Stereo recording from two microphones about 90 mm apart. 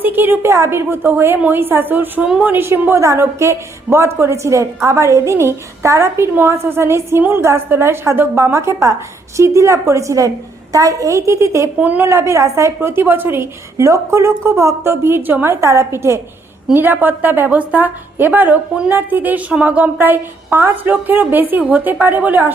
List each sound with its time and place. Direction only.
0.0 s a woman's voice: 20° right (ahead or behind)
2.2 s a woman's voice: 10° right (ahead or behind)
2.5 s a woman's voice: 25° right (ahead or behind)
11.8 s a woman's voice: 20° right (ahead or behind)
12.0 s a woman's voice: 30° right (ahead or behind)